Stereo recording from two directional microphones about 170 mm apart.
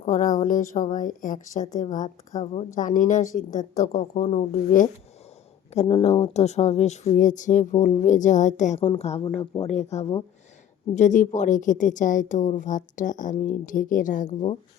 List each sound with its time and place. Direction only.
0.0 s a woman's voice: 50° left (ahead or behind)
2.4 s a woman's voice: 40° left (ahead or behind)
5.7 s a woman's voice: 35° left (ahead or behind)